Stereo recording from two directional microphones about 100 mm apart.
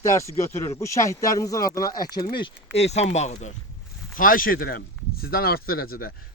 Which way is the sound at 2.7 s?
90° left.